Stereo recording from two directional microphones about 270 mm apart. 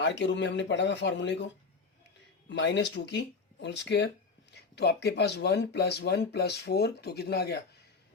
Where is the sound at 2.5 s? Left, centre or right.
Left.